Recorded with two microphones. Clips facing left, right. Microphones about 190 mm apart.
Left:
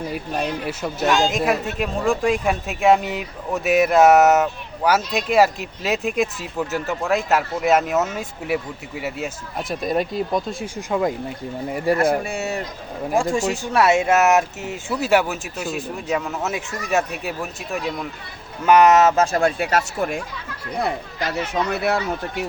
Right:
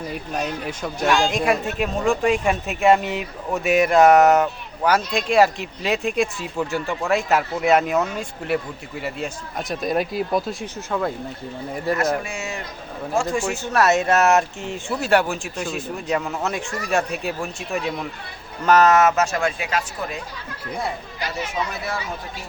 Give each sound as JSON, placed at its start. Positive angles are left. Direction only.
{"t": 0.1, "sound": "speech", "side_deg": 5}
{"t": 10.8, "sound": "speech", "side_deg": 15}
{"t": 12.2, "sound": "speech", "side_deg": 35}
{"t": 13.3, "sound": "speech", "side_deg": 15}
{"t": 18.6, "sound": "speech", "side_deg": 15}
{"t": 19.7, "sound": "speech", "side_deg": 50}
{"t": 21.7, "sound": "speech", "side_deg": 65}